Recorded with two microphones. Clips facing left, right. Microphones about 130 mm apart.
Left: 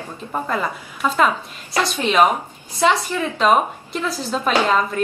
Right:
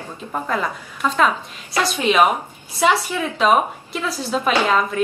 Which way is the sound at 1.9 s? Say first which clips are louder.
Even; 10° right (ahead or behind).